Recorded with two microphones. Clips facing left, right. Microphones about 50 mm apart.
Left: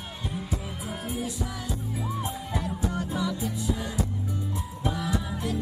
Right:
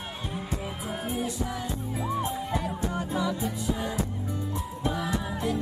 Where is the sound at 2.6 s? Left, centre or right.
Centre.